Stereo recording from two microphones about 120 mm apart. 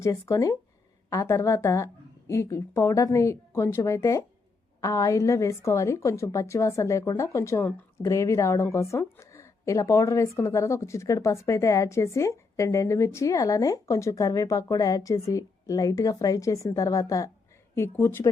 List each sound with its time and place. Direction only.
0.0 s a woman's voice: 25° left (ahead or behind)